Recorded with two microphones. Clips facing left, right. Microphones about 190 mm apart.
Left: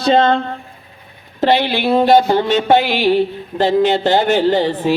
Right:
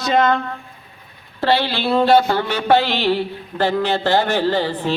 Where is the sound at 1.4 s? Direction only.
20° left (ahead or behind).